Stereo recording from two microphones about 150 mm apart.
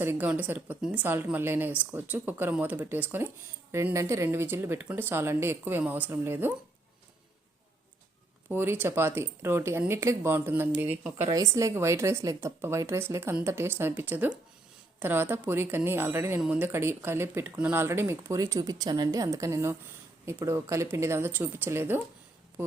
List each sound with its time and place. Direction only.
0.0 s a woman's voice: 15° right (ahead or behind)
8.5 s a woman's voice: 15° right (ahead or behind)